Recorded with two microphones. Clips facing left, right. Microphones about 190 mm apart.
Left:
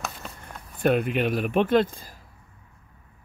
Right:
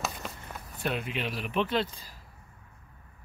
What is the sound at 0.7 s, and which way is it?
Speech, 50° left (ahead or behind).